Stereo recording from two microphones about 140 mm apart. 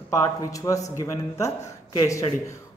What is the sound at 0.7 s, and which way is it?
Speech, 25° left (ahead or behind).